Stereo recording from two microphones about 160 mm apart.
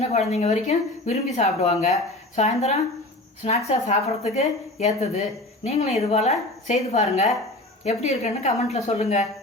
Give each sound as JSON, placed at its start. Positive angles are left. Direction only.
{"t": 0.1, "sound": "speech", "side_deg": 45}